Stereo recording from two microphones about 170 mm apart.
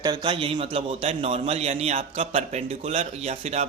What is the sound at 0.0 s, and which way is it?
Speech, 25° right (ahead or behind).